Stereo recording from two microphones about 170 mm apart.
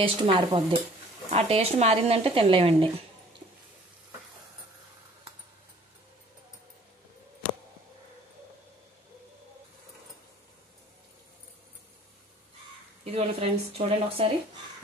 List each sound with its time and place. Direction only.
0.0 s speech: 30° right (ahead or behind)
13.0 s speech: 35° right (ahead or behind)